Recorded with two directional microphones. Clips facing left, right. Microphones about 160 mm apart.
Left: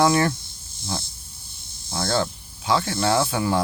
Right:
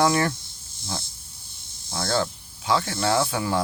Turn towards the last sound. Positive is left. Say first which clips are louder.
# left 2 dB
turn(degrees=25)  # may be behind; listen again after turning